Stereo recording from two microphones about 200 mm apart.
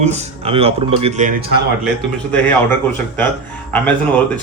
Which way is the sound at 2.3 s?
10° left (ahead or behind).